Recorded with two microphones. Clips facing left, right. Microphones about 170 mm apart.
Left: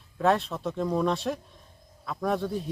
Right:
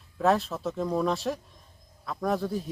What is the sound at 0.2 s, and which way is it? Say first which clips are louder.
Speech: even; centre (ahead or behind).